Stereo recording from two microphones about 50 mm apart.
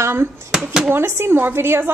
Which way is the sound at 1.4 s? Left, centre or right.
Right.